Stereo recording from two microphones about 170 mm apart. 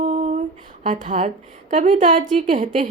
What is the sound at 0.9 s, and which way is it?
A woman's voice, 45° right (ahead or behind).